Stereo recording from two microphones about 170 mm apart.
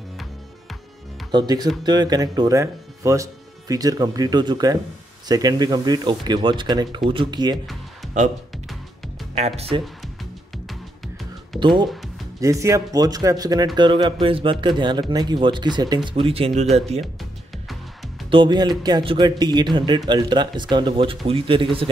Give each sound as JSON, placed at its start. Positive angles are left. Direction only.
{"t": 1.3, "sound": "speech", "side_deg": -25}
{"t": 7.5, "sound": "music", "side_deg": 0}
{"t": 9.6, "sound": "speech", "side_deg": -35}
{"t": 11.6, "sound": "speech", "side_deg": -25}
{"t": 17.0, "sound": "music", "side_deg": 0}
{"t": 18.3, "sound": "speech", "side_deg": -25}